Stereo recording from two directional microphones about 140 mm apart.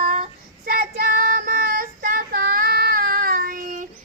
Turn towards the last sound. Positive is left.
turn(degrees=-75)  # may be behind; listen again after turning